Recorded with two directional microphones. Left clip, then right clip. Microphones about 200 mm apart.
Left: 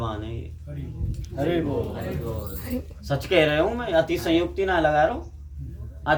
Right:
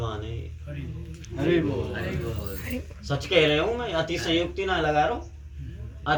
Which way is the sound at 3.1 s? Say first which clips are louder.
Left 1 dB; 25° left (ahead or behind).